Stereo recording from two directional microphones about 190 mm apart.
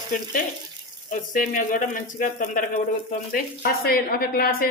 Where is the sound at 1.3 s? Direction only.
45° left (ahead or behind).